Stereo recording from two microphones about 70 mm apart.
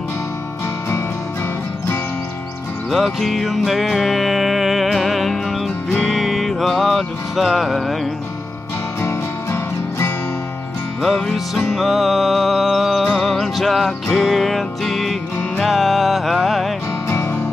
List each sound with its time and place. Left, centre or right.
2.9 s music: centre
9.0 s music: left
11.3 s music: centre
17.1 s music: left